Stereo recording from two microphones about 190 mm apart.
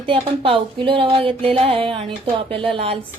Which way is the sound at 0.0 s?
30° right (ahead or behind).